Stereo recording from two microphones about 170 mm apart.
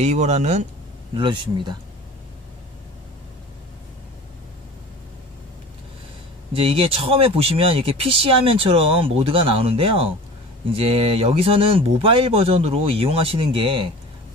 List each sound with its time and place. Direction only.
0.0 s speech: 40° right (ahead or behind)
1.1 s speech: 25° right (ahead or behind)
6.5 s speech: 35° right (ahead or behind)